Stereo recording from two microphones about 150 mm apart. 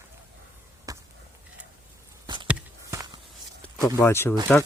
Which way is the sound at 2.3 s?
30° right (ahead or behind).